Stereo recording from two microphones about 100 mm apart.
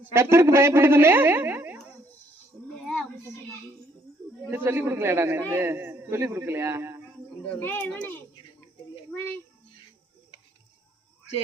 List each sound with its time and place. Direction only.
0.1 s speech: 25° right (ahead or behind)
4.5 s a man's voice: 20° right (ahead or behind)
7.6 s a child's voice: 15° left (ahead or behind)